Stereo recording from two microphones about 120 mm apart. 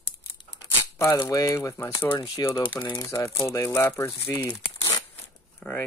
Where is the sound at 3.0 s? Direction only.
20° left (ahead or behind).